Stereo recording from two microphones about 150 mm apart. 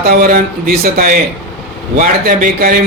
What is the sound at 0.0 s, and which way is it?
Speech, 70° right (ahead or behind).